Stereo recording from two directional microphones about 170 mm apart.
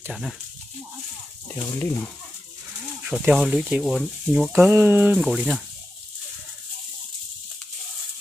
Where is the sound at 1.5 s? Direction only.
15° left (ahead or behind).